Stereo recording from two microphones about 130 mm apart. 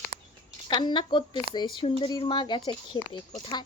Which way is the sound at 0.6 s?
35° left (ahead or behind).